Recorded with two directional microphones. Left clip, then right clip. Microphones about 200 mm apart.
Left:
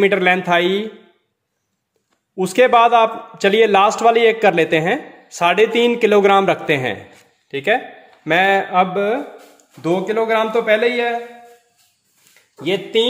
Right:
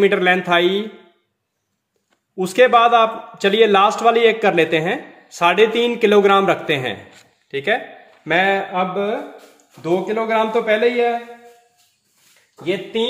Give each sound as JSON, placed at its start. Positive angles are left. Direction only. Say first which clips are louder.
{"t": 0.0, "sound": "a man's voice", "louder": "left 1 dB", "side_deg": 15}
{"t": 2.3, "sound": "a man's voice", "louder": "even", "side_deg": 15}